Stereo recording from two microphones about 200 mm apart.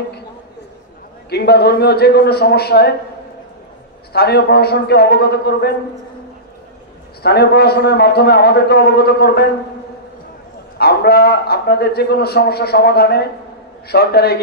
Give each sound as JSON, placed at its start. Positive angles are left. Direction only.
{"t": 1.3, "sound": "a man's voice", "side_deg": 55}
{"t": 4.1, "sound": "a man's voice", "side_deg": 55}
{"t": 7.2, "sound": "a man's voice", "side_deg": 55}
{"t": 10.8, "sound": "a man's voice", "side_deg": 50}